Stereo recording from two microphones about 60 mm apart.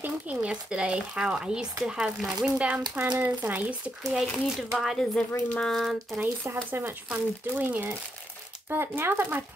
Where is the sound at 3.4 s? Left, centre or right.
Right.